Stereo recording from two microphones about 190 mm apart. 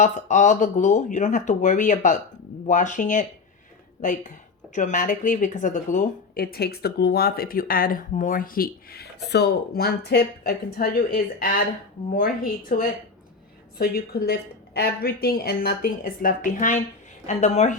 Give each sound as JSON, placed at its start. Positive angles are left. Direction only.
{"t": 0.0, "sound": "speech", "side_deg": 40}
{"t": 13.7, "sound": "speech", "side_deg": 55}